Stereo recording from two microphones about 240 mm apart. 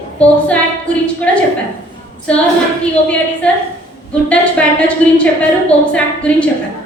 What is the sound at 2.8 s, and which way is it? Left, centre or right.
A woman's voice, centre.